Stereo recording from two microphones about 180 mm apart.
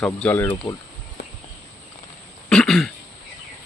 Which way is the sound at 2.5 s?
5° left (ahead or behind).